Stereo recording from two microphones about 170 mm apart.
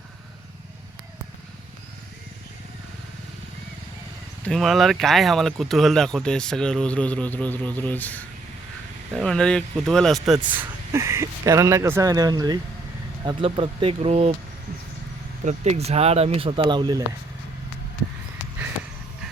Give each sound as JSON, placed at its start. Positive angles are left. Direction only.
{"t": 4.4, "sound": "speech", "side_deg": 0}
{"t": 15.4, "sound": "speech", "side_deg": -40}